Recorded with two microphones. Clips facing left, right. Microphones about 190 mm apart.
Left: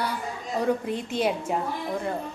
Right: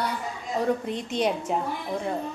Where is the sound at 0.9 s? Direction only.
5° left (ahead or behind).